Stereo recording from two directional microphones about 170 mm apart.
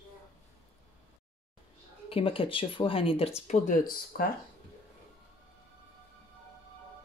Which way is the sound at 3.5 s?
55° left (ahead or behind).